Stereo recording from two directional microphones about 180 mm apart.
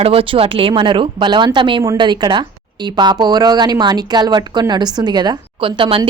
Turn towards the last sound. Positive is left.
turn(degrees=-30)  # may be behind; listen again after turning